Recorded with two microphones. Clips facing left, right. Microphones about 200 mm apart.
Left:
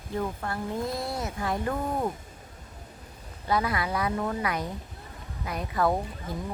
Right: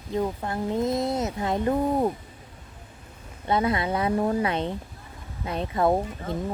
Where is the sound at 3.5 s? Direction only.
25° right (ahead or behind).